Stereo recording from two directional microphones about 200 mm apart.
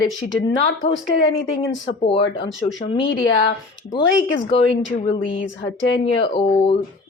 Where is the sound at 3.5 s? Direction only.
25° left (ahead or behind).